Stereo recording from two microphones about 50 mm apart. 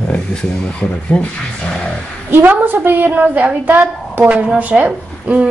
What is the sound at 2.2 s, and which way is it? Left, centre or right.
A woman's voice, right.